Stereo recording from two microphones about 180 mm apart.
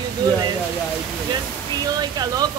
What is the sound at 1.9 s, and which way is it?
Speech, 20° right (ahead or behind).